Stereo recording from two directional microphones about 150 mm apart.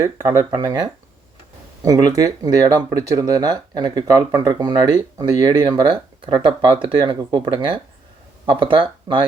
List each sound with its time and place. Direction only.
0.0 s speech: 25° right (ahead or behind)